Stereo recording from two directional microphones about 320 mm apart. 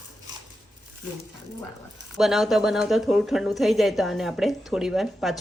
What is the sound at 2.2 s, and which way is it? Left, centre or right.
A woman's voice, centre.